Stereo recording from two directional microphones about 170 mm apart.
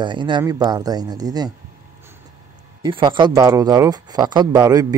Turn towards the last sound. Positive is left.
turn(degrees=-20)  # may be behind; listen again after turning